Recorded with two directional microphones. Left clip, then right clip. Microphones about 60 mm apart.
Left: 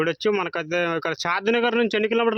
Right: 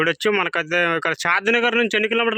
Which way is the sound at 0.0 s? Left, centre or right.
Centre.